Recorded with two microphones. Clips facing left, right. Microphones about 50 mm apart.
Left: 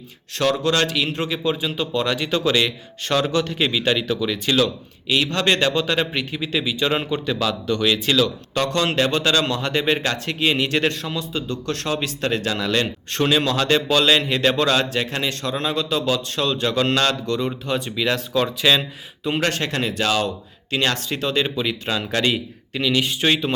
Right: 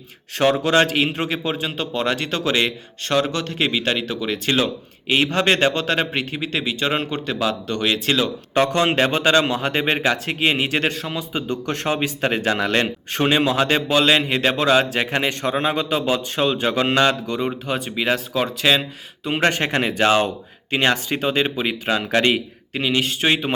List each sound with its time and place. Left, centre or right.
0.7 s a man's voice: right
1.1 s a man's voice: centre
11.1 s a man's voice: right
13.2 s a man's voice: centre
14.9 s a man's voice: right; by 18.9 s centre
19.4 s a man's voice: right
20.9 s a man's voice: centre; by 22.4 s right
22.7 s a man's voice: right